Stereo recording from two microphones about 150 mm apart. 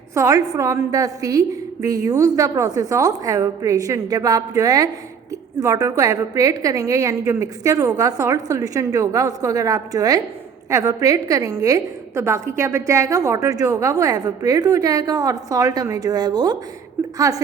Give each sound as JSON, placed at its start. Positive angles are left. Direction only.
{"t": 0.1, "sound": "a woman's voice", "side_deg": -20}